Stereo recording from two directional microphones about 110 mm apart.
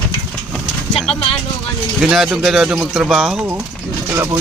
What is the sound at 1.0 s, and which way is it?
Speech, 60° left (ahead or behind).